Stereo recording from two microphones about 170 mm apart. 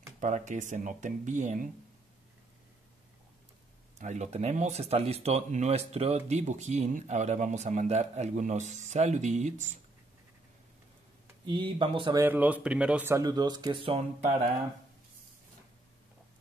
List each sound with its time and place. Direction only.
0.2 s speech: 45° right (ahead or behind)
4.0 s speech: 45° right (ahead or behind)
11.4 s speech: 30° right (ahead or behind)
12.2 s speech: 10° right (ahead or behind); by 14.3 s 35° right (ahead or behind)